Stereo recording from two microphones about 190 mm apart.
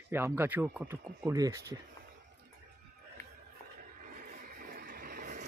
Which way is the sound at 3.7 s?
45° right (ahead or behind).